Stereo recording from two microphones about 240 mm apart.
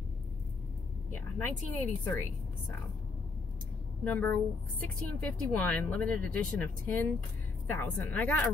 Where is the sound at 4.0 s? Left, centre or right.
Centre.